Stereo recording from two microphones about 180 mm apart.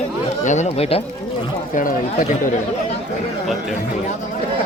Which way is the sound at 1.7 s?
45° left (ahead or behind).